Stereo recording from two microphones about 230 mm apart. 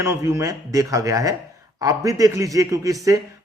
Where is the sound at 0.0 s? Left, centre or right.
Centre.